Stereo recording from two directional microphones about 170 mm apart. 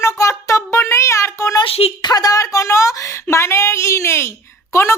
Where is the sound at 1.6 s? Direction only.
35° left (ahead or behind).